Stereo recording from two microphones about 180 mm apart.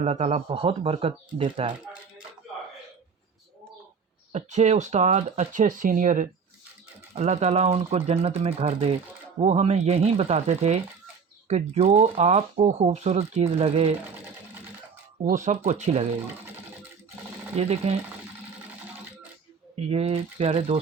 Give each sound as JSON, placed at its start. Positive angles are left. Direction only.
{"t": 0.0, "sound": "speech", "side_deg": -35}
{"t": 4.3, "sound": "speech", "side_deg": -40}
{"t": 15.2, "sound": "speech", "side_deg": -45}
{"t": 17.6, "sound": "speech", "side_deg": -35}
{"t": 19.9, "sound": "speech", "side_deg": -35}